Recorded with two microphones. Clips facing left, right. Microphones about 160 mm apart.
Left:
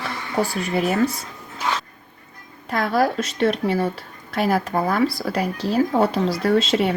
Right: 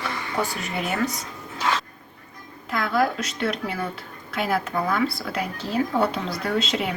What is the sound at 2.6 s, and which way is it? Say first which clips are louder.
Speech: left 3 dB; 40° left (ahead or behind).